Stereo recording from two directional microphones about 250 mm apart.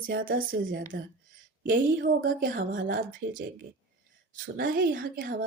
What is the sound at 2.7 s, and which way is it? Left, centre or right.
Speech, right.